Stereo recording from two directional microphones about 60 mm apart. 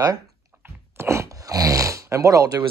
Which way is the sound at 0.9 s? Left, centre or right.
Right.